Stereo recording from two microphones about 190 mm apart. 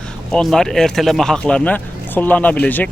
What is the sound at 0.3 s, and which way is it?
Speech, centre (ahead or behind).